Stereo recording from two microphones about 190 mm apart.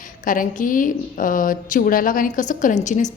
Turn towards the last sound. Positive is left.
turn(degrees=40)  # may be behind; listen again after turning